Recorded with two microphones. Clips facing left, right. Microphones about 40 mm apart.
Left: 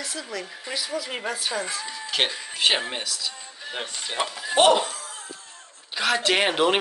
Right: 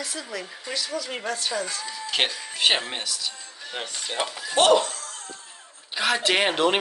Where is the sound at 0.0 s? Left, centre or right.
Centre.